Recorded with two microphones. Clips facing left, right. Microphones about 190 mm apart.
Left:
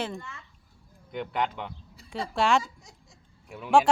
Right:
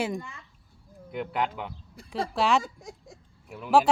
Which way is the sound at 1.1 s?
5° right (ahead or behind).